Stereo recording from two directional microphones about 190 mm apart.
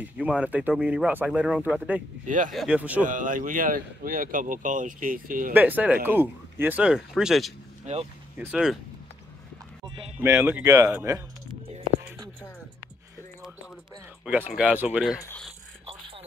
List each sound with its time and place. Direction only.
0.0 s speech: 5° right (ahead or behind)
2.2 s speech: 40° right (ahead or behind)
2.5 s speech: 5° right (ahead or behind)
3.1 s speech: 45° right (ahead or behind)
5.5 s speech: 10° right (ahead or behind)
7.8 s speech: 35° right (ahead or behind)
8.4 s speech: 5° right (ahead or behind)
10.1 s speech: 10° right (ahead or behind)
14.2 s speech: 5° right (ahead or behind)
15.2 s speech: 5° left (ahead or behind)